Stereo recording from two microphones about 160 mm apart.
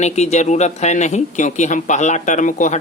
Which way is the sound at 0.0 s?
45° left (ahead or behind).